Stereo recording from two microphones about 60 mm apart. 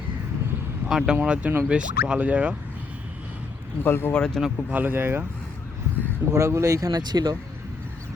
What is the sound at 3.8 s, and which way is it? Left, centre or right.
Speech, left.